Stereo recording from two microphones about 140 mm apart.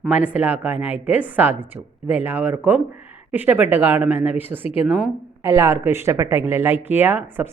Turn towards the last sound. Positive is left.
turn(degrees=-15)  # may be behind; listen again after turning